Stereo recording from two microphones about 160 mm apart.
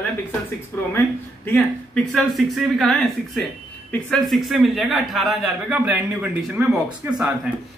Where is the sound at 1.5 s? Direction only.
Centre (ahead or behind); by 7.2 s 15° right (ahead or behind).